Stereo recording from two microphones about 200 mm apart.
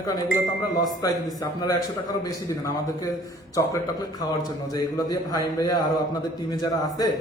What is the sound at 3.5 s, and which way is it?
Speech, 15° left (ahead or behind).